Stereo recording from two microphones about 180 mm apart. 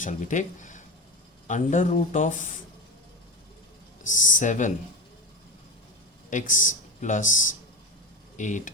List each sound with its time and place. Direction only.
0.0 s speech: 45° left (ahead or behind)
4.0 s speech: 45° left (ahead or behind)
6.3 s speech: 45° left (ahead or behind)